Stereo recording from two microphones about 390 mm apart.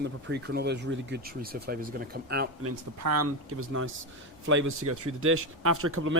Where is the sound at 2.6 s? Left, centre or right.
Right.